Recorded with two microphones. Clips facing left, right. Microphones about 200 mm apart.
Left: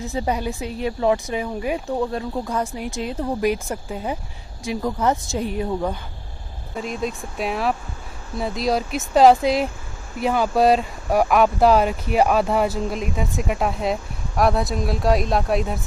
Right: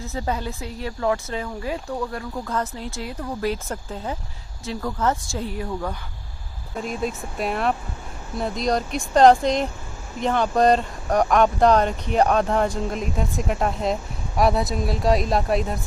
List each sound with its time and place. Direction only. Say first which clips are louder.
0.0 s speech: left 3 dB; 15° left (ahead or behind)
2.5 s speech: left 2 dB; 10° left (ahead or behind)
6.7 s speech: even; centre (ahead or behind)